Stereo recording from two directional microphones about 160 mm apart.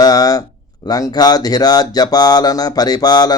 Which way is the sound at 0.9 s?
25° left (ahead or behind).